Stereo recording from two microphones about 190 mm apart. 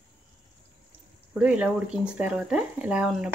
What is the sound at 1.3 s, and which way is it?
Speech, 5° right (ahead or behind).